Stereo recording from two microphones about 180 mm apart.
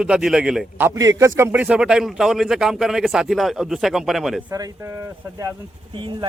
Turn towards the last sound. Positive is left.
turn(degrees=-30)  # may be behind; listen again after turning